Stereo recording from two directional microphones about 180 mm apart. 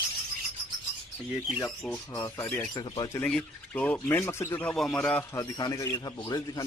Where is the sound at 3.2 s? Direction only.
5° left (ahead or behind).